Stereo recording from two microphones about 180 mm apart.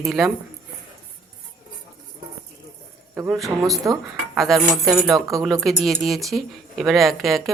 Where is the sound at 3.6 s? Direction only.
20° right (ahead or behind).